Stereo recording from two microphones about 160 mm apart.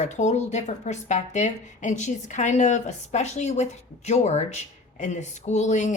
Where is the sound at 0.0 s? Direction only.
45° left (ahead or behind).